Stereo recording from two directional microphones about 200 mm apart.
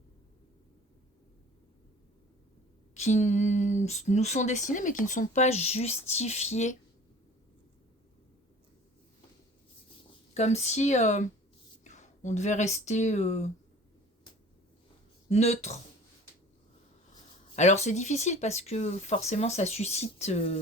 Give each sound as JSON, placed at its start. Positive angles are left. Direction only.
{"t": 2.9, "sound": "speech", "side_deg": 35}
{"t": 10.3, "sound": "speech", "side_deg": 35}
{"t": 15.3, "sound": "speech", "side_deg": 35}
{"t": 17.5, "sound": "speech", "side_deg": 35}